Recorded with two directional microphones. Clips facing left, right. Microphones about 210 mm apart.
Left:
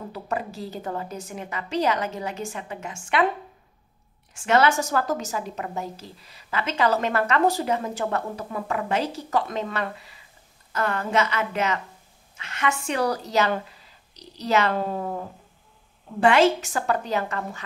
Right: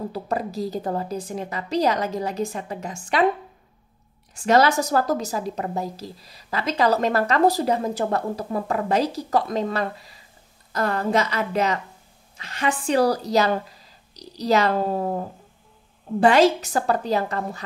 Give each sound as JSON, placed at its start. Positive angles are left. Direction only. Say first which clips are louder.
{"t": 0.1, "sound": "a woman's voice", "louder": "right 3 dB", "side_deg": -35}
{"t": 4.3, "sound": "a woman's voice", "louder": "right 2 dB", "side_deg": -35}